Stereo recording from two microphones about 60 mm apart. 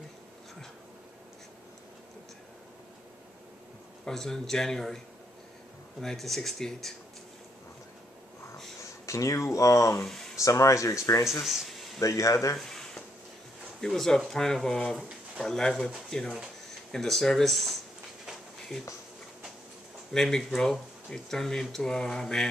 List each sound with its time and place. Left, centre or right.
4.0 s speech: centre
9.0 s speech: left
11.4 s speech: centre
12.0 s speech: left
12.5 s a sound: centre
13.7 s speech: centre
15.0 s pigeon: centre
15.4 s speech: centre
20.1 s speech: centre